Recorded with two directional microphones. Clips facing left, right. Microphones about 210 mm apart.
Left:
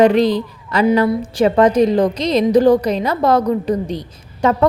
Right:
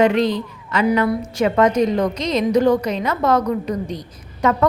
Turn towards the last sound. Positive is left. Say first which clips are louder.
# left 2 dB
turn(degrees=30)  # may be behind; listen again after turning